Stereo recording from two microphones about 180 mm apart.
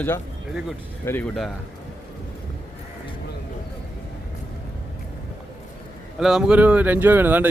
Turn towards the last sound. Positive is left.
turn(degrees=-10)  # may be behind; listen again after turning